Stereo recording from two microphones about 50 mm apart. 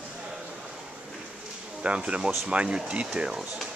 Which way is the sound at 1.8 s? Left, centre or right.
Right.